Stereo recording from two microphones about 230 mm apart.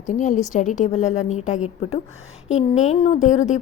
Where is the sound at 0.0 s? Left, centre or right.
Left.